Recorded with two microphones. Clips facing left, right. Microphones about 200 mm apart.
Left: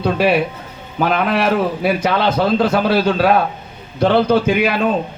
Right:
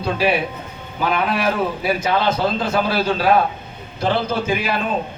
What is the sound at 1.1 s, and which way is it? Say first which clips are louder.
A man's voice: left 4 dB; 60° left (ahead or behind).